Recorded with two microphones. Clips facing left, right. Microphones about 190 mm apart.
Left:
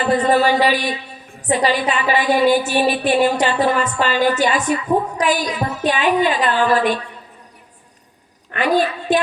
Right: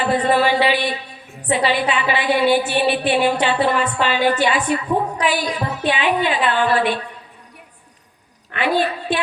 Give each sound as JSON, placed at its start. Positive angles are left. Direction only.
{"t": 0.1, "sound": "a woman's voice", "side_deg": 40}
{"t": 8.5, "sound": "a woman's voice", "side_deg": 40}